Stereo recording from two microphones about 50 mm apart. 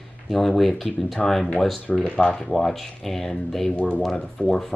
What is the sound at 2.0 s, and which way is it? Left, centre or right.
Speech, centre.